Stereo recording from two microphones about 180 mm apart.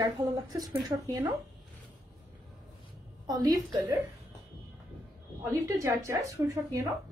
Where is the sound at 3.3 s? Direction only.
20° right (ahead or behind).